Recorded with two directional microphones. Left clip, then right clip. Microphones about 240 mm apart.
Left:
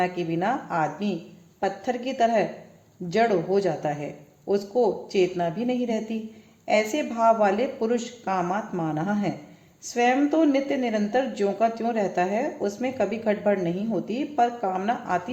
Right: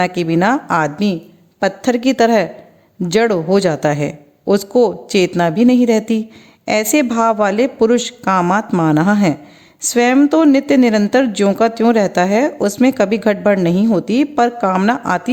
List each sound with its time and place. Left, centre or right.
0.0 s speech: right